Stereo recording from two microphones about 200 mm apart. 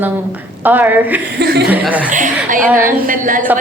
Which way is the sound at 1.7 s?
5° right (ahead or behind).